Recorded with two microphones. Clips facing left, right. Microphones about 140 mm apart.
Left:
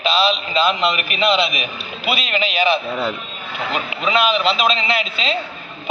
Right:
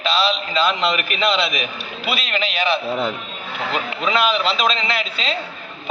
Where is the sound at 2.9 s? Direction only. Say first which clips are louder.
Even; 20° right (ahead or behind).